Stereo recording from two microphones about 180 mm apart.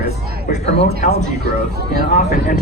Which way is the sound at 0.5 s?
35° left (ahead or behind).